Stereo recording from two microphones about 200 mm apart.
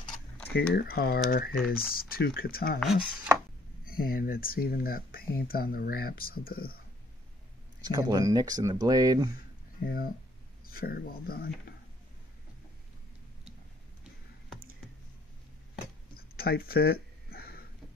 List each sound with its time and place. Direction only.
0.5 s speech: 50° left (ahead or behind)
2.8 s speech: centre (ahead or behind)
3.8 s speech: 45° left (ahead or behind)
7.8 s speech: 20° right (ahead or behind)
9.8 s speech: 45° left (ahead or behind)
16.2 s a sound: 50° left (ahead or behind)